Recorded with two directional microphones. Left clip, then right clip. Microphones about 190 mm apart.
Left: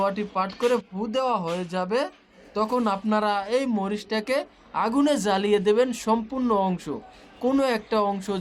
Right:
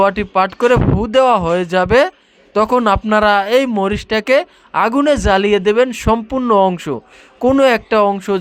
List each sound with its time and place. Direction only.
0.0 s speech: 40° right (ahead or behind)